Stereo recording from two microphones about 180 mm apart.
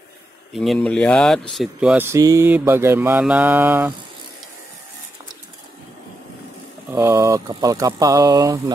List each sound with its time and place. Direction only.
0.5 s speech: centre (ahead or behind)
6.9 s speech: 15° right (ahead or behind)